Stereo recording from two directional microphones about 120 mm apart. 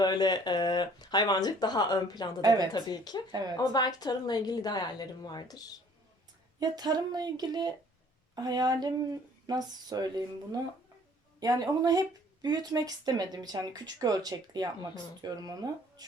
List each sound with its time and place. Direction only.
0.0 s speech: 35° left (ahead or behind)
2.4 s speech: 30° right (ahead or behind)
2.7 s speech: 35° left (ahead or behind)
6.6 s speech: 35° right (ahead or behind)